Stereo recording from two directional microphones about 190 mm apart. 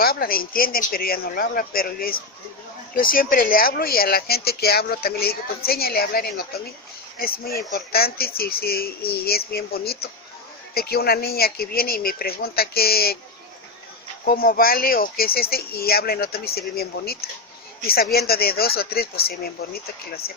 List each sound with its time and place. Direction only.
0.0 s speech: 50° left (ahead or behind)
14.3 s speech: 50° left (ahead or behind)